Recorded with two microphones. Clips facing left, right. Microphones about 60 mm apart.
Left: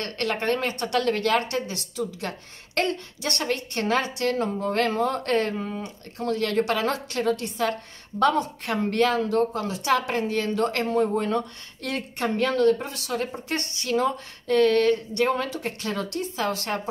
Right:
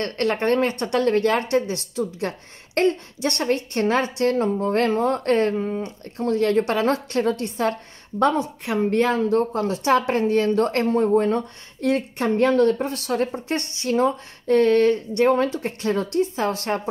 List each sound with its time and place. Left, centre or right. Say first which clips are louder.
0.0 s a woman's voice: right 5 dB; right
8.2 s a woman's voice: right 1 dB; right